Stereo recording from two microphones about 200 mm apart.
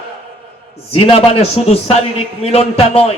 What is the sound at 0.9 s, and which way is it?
A man's voice, 30° left (ahead or behind).